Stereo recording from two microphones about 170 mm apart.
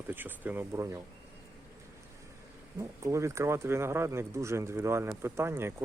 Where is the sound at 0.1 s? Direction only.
10° right (ahead or behind).